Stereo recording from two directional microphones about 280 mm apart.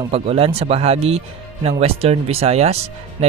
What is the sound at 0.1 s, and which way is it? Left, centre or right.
Speech, right.